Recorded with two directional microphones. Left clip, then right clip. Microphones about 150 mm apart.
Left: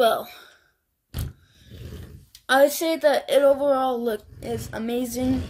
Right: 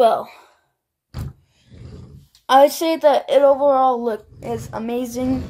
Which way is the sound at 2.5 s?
5° right (ahead or behind).